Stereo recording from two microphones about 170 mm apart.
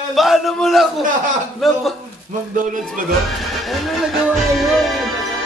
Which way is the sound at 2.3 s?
50° right (ahead or behind).